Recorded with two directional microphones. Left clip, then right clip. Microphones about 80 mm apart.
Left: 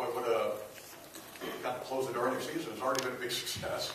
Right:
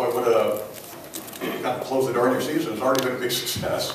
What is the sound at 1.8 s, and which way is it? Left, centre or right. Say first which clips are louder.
A man's voice: right 12 dB; centre.